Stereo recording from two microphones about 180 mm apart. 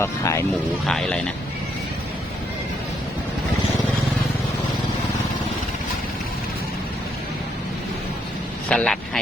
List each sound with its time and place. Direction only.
0.0 s speech: 15° left (ahead or behind)
0.9 s speech: 5° left (ahead or behind)
8.7 s speech: 5° left (ahead or behind)